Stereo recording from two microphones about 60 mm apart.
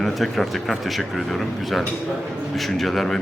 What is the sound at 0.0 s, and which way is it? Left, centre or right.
Speech, centre.